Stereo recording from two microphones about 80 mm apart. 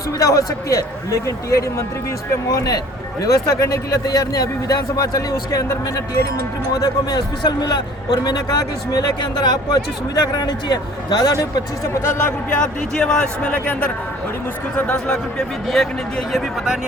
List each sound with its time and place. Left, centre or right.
0.2 s speech: left
6.7 s speech: left
7.4 s a man's voice: left
9.3 s a man's voice: left
12.0 s speech: left
12.5 s speech: centre